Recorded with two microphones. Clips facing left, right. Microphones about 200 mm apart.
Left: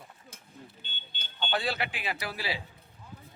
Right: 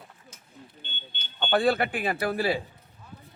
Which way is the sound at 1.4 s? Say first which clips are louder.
Right 8 dB; 55° right (ahead or behind).